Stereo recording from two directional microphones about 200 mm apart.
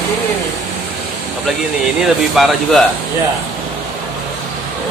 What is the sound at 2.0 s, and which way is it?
Speech, centre (ahead or behind).